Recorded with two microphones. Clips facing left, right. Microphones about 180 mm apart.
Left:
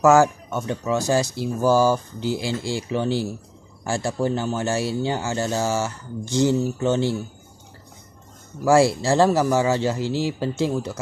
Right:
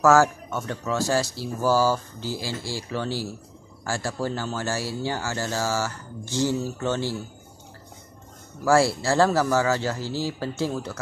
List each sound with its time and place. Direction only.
0.0 s speech: 20° left (ahead or behind)
8.6 s speech: 20° left (ahead or behind)